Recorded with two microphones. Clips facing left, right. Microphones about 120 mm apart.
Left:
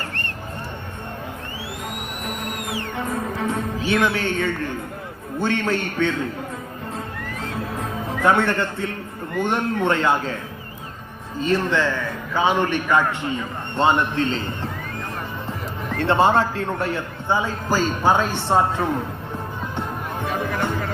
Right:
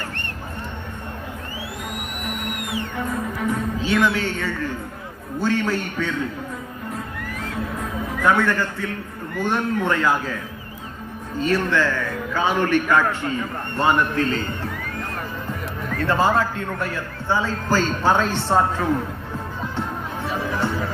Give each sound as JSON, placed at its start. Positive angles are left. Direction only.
{"t": 2.9, "sound": "music", "side_deg": 25}
{"t": 3.8, "sound": "a sound", "side_deg": 70}
{"t": 4.2, "sound": "a man's voice", "side_deg": 55}
{"t": 7.8, "sound": "music", "side_deg": 25}
{"t": 9.4, "sound": "a man's voice", "side_deg": 20}
{"t": 11.4, "sound": "a man's voice", "side_deg": 25}
{"t": 16.0, "sound": "a man's voice", "side_deg": 25}
{"t": 20.6, "sound": "music", "side_deg": 20}